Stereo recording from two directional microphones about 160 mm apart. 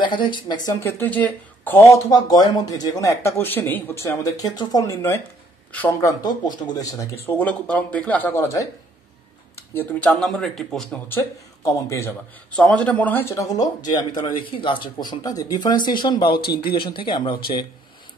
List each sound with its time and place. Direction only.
0.0 s speech: 30° left (ahead or behind)
0.7 s speech: 15° left (ahead or behind)
9.8 s speech: 10° left (ahead or behind)
12.5 s speech: 5° left (ahead or behind); by 17.4 s 30° left (ahead or behind)